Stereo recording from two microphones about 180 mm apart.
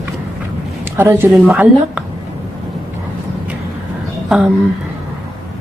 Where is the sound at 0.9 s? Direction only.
10° right (ahead or behind).